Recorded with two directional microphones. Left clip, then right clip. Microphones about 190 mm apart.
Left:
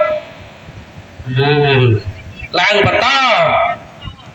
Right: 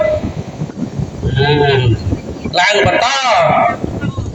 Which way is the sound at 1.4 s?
25° right (ahead or behind).